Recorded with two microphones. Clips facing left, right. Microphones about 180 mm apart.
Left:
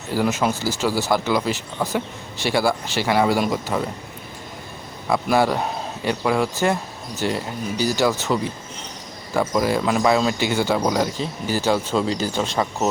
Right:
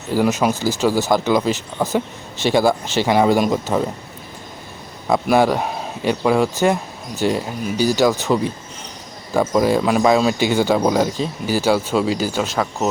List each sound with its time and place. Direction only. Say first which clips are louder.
0.1 s speech: right 4 dB; 15° right (ahead or behind)
5.0 s speech: right 3 dB; 20° right (ahead or behind)
9.6 s speech: right 4 dB; 15° right (ahead or behind); by 12.9 s centre (ahead or behind)